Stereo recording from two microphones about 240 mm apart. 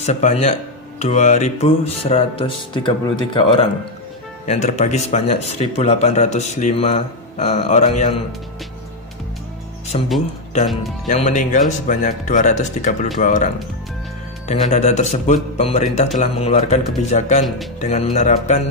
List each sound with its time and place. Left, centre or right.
0.0 s speech: left
9.9 s speech: left
14.5 s speech: left